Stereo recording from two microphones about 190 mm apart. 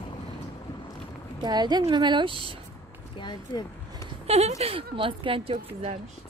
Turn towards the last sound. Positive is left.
turn(degrees=-30)  # may be behind; listen again after turning